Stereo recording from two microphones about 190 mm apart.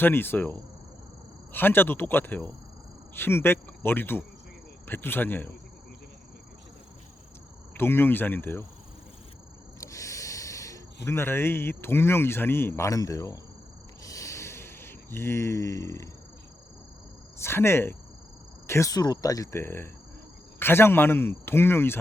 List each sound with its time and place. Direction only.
0.0 s speech: 10° left (ahead or behind)
7.7 s speech: 10° left (ahead or behind)
9.8 s speech: 15° left (ahead or behind)
14.0 s a sound: 15° left (ahead or behind)
17.3 s speech: 15° left (ahead or behind)